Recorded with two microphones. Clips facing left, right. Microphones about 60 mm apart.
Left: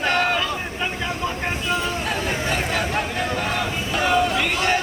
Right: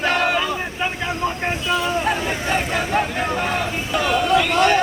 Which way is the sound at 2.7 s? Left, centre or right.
Centre.